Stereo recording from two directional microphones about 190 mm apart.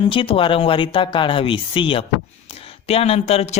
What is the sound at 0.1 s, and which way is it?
Speech, 30° left (ahead or behind).